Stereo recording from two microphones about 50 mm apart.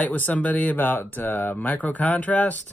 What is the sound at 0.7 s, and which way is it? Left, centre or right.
Speech, left.